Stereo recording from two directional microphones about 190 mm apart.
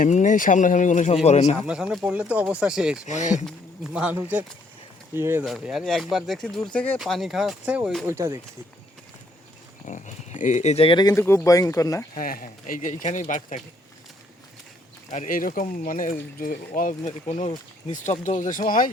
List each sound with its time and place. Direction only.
0.0 s speech: 40° left (ahead or behind)
1.5 s speech: 5° right (ahead or behind)
3.1 s speech: 40° left (ahead or behind)
3.3 s speech: 5° right (ahead or behind)
5.5 s speech: centre (ahead or behind)
9.8 s speech: 40° left (ahead or behind)
11.1 s speech: 15° left (ahead or behind)
12.1 s speech: 50° left (ahead or behind)
15.1 s speech: 45° left (ahead or behind)